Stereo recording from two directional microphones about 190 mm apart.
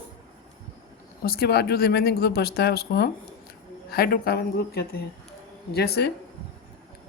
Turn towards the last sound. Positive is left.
turn(degrees=60)  # may be behind; listen again after turning